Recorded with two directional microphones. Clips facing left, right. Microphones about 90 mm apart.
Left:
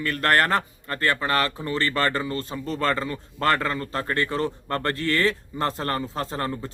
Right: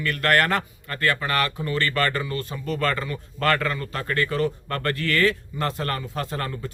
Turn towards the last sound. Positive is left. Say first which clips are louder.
# left 1 dB
turn(degrees=25)  # may be behind; listen again after turning